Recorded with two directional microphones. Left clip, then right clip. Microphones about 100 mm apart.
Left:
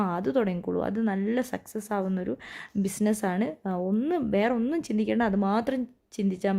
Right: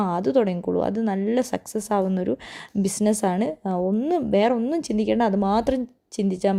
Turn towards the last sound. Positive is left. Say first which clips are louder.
# right 6 dB
turn(degrees=-25)  # may be behind; listen again after turning